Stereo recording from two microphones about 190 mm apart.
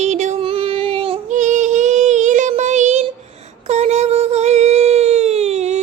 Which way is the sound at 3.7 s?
35° right (ahead or behind).